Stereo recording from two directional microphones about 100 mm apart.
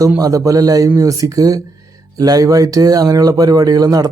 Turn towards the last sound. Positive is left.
turn(degrees=-40)  # may be behind; listen again after turning